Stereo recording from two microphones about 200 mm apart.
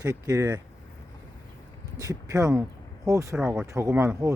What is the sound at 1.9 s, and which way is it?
Speech, 15° right (ahead or behind).